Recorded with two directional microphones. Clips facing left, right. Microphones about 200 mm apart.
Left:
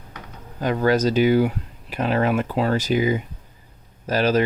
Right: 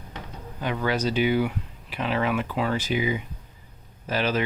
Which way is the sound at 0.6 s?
40° left (ahead or behind).